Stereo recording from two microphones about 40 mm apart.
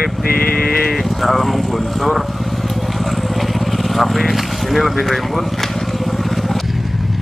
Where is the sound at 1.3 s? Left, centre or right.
Centre.